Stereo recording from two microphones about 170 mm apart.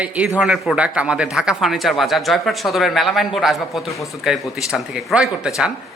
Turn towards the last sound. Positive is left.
turn(degrees=-5)  # may be behind; listen again after turning